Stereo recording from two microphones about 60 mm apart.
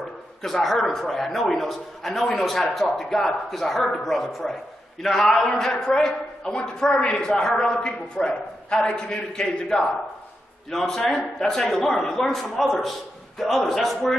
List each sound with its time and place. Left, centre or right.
0.4 s a man's voice: centre
11.0 s a woman's voice: centre